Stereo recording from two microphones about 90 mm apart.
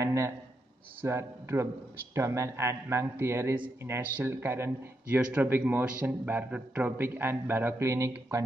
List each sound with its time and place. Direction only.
0.0 s a man's voice: 35° right (ahead or behind)